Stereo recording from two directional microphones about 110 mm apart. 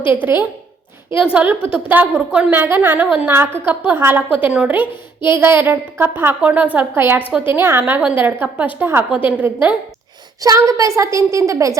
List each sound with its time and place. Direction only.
0.1 s a woman's voice: 15° right (ahead or behind)
10.4 s a woman's voice: 30° right (ahead or behind)